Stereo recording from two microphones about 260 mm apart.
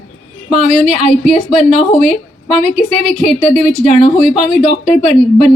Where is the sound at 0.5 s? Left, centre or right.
Right.